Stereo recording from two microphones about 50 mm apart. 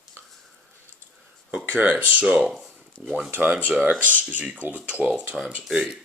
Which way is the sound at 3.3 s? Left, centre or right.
Right.